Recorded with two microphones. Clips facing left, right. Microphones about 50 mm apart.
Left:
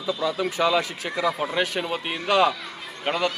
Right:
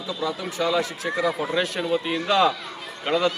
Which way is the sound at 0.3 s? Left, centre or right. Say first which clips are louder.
Left 3 dB; left.